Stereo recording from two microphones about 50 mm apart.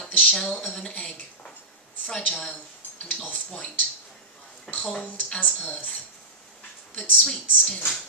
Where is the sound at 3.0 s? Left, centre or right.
Left.